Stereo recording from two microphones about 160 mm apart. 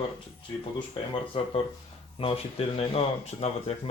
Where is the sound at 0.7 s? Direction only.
30° left (ahead or behind).